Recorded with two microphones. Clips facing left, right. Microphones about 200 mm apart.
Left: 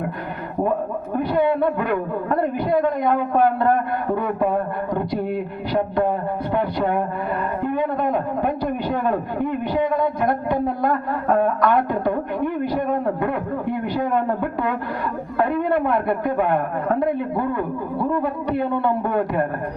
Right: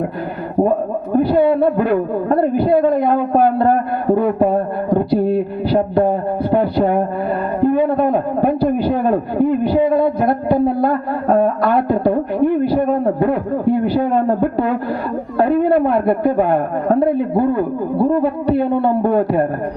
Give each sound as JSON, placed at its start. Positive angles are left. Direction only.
{"t": 1.1, "sound": "a man's voice", "side_deg": -35}